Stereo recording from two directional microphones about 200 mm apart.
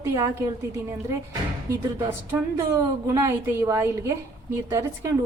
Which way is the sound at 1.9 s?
15° right (ahead or behind).